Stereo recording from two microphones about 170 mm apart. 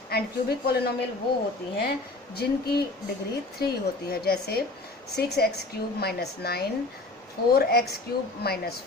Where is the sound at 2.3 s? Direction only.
65° left (ahead or behind).